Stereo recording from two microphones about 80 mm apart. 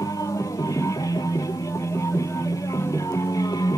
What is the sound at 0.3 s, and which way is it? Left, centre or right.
Music, left.